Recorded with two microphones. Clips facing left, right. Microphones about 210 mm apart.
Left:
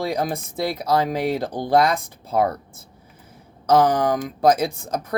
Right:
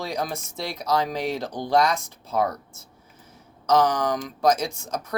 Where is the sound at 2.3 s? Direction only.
30° left (ahead or behind).